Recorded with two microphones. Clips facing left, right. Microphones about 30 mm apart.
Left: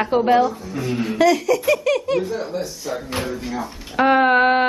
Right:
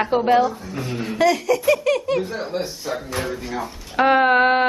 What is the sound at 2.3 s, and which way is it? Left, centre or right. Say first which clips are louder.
Speech: left 1 dB; right.